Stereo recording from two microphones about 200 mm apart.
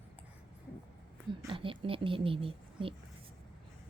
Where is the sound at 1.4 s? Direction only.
25° right (ahead or behind).